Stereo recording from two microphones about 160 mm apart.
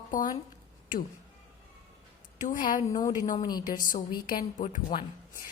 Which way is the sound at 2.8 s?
20° left (ahead or behind).